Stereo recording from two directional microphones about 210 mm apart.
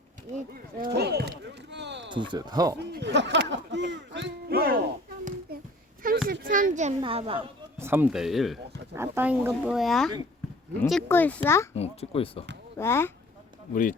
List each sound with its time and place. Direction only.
0.8 s speech: 50° right (ahead or behind)
1.7 s a sound: 55° right (ahead or behind)
2.1 s speech: 20° right (ahead or behind)
2.7 s speech: 55° right (ahead or behind); by 7.5 s 25° right (ahead or behind)
7.8 s speech: 10° right (ahead or behind); by 11.7 s 15° left (ahead or behind)
11.7 s speech: 30° left (ahead or behind)
12.7 s speech: 10° left (ahead or behind)